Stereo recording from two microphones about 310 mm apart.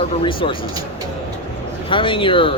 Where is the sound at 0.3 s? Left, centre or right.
Centre.